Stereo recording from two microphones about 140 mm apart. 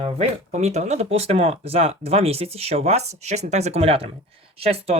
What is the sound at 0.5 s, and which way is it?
Speech, 55° right (ahead or behind).